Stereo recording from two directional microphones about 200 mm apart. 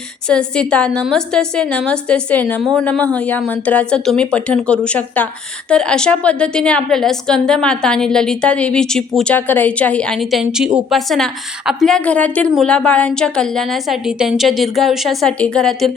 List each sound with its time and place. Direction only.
0.3 s speech: 5° left (ahead or behind)